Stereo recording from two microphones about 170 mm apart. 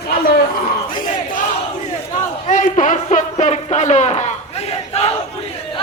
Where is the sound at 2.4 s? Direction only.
50° left (ahead or behind).